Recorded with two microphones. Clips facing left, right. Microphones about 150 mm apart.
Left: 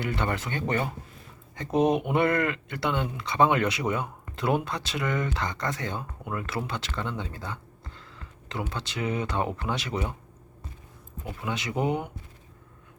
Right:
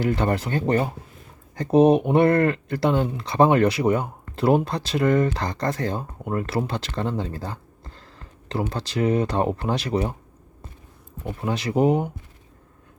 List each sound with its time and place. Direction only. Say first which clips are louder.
0.0 s speech: right 7 dB; 35° right (ahead or behind)
11.3 s speech: right 6 dB; 35° right (ahead or behind)